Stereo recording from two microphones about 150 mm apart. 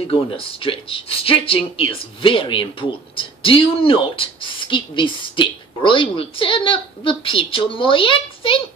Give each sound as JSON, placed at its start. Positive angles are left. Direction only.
{"t": 0.0, "sound": "speech", "side_deg": 40}